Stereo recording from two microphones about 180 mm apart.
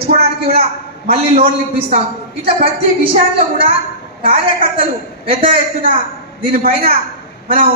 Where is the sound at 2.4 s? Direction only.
30° right (ahead or behind).